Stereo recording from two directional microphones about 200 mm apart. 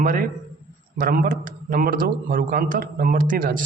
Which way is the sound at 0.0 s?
45° right (ahead or behind).